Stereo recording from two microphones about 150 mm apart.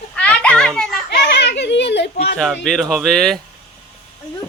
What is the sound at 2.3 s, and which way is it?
Speech, 5° left (ahead or behind).